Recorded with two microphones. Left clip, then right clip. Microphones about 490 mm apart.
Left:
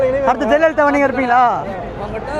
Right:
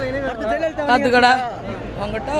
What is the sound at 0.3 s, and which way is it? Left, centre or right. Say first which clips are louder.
Speech: left 8 dB; left.